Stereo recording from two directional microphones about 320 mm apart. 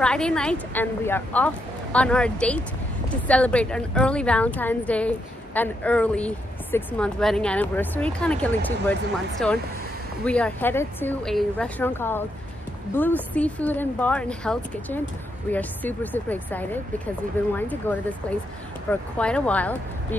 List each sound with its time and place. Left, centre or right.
0.0 s a woman's voice: centre
18.9 s a woman's voice: centre